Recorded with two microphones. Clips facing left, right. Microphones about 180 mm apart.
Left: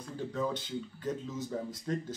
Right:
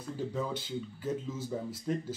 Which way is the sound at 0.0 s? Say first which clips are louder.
Left 1 dB; 10° right (ahead or behind).